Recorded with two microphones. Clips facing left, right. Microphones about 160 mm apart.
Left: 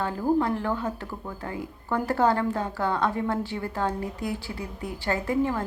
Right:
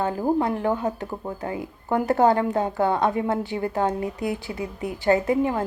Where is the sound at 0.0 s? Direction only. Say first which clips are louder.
Right 2 dB; 20° right (ahead or behind).